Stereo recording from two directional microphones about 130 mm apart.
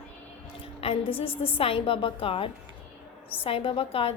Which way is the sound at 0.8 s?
45° left (ahead or behind).